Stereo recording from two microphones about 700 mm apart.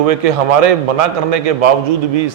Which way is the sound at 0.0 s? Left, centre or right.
Right.